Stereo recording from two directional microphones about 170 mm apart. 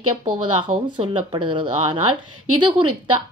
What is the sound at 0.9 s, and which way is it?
Speech, 30° right (ahead or behind).